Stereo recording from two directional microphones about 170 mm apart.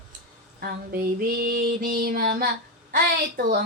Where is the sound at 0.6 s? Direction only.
60° right (ahead or behind).